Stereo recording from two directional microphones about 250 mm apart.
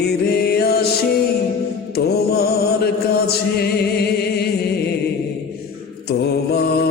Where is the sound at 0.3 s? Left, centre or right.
Left.